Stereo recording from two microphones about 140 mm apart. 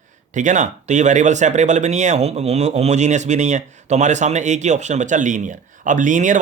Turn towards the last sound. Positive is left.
turn(degrees=-65)  # may be behind; listen again after turning